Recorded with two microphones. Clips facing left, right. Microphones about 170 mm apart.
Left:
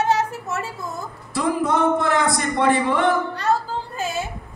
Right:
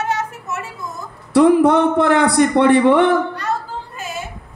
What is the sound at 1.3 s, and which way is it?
Speech, 65° right (ahead or behind).